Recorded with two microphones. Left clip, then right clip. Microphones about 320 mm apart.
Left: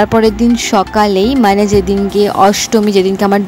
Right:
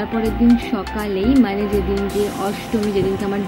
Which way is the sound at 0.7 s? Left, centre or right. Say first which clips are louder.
Left 13 dB; left.